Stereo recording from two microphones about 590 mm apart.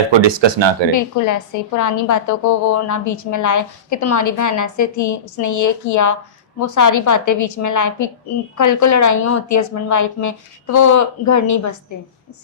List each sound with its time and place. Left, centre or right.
0.1 s speech: right
0.9 s a woman's voice: left